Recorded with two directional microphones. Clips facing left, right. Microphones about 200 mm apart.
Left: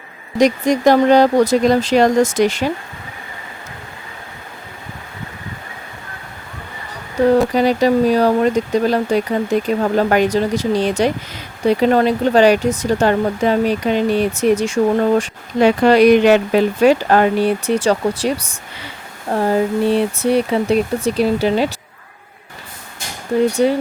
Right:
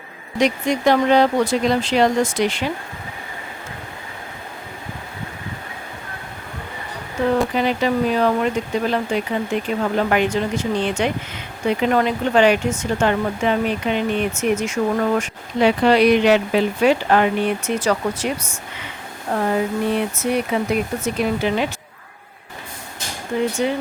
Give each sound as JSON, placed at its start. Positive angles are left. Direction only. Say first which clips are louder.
{"t": 0.3, "sound": "speech", "louder": "left 5 dB", "side_deg": 40}
{"t": 7.5, "sound": "speech", "louder": "left 5 dB", "side_deg": 40}
{"t": 15.6, "sound": "speech", "louder": "left 4 dB", "side_deg": 45}
{"t": 23.6, "sound": "speech", "louder": "left 7 dB", "side_deg": 40}